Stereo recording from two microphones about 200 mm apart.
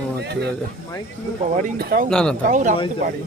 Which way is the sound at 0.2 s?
60° right (ahead or behind).